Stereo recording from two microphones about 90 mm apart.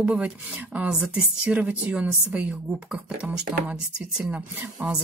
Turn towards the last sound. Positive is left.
turn(degrees=-10)  # may be behind; listen again after turning